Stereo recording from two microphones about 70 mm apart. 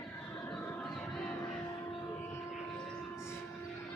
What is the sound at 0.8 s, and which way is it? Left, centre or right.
Music, centre.